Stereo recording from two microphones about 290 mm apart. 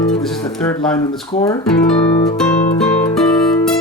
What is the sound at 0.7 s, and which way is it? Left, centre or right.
Speech, centre.